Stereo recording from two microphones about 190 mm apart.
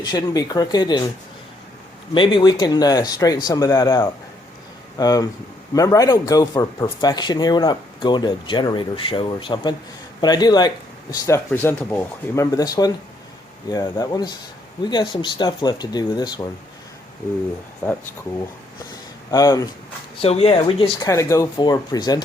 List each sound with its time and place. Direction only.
0.0 s a man's voice: 20° left (ahead or behind)
2.1 s a man's voice: 25° left (ahead or behind)
19.3 s a man's voice: 20° left (ahead or behind)
20.2 s a man's voice: 30° left (ahead or behind)
21.1 s a man's voice: 15° left (ahead or behind)